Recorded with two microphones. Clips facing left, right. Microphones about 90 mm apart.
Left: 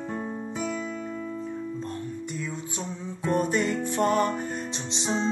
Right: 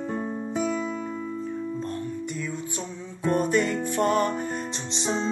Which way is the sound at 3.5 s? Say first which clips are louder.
Right 2 dB; 20° left (ahead or behind).